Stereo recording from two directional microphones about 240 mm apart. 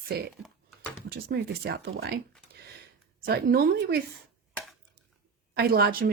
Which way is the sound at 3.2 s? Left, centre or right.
Right.